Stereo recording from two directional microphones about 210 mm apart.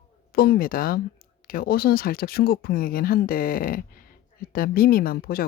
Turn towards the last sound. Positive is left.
turn(degrees=45)  # may be behind; listen again after turning